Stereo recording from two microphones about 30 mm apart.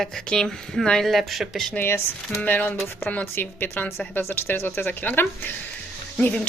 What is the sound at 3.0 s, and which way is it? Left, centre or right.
Speech, left.